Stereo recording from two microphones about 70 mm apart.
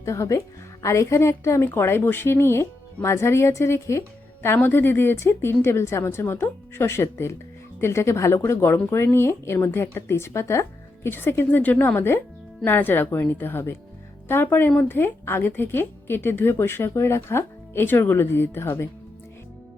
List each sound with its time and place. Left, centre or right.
0.0 s a woman's voice: left
4.4 s a woman's voice: left